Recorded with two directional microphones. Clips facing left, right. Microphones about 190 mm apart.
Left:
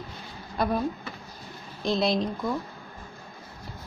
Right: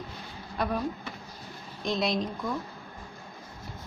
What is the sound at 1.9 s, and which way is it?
Speech, 35° left (ahead or behind).